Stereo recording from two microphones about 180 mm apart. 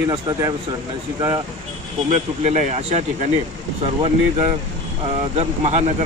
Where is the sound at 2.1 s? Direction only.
40° right (ahead or behind).